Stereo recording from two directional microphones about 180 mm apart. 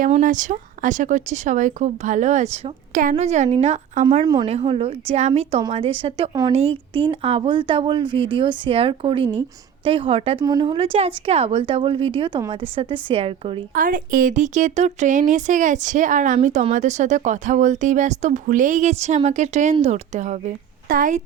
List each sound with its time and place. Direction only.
0.0 s a woman's voice: 45° right (ahead or behind)
13.7 s a woman's voice: 50° right (ahead or behind)